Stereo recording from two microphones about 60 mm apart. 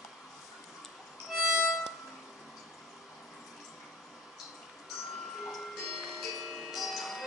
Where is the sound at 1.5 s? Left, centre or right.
Centre.